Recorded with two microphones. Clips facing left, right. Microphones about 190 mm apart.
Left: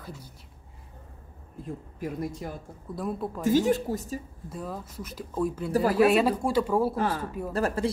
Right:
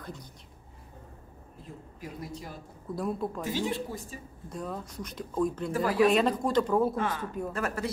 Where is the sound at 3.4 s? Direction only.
45° left (ahead or behind).